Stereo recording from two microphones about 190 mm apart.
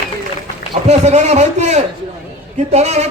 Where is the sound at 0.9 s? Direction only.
35° right (ahead or behind).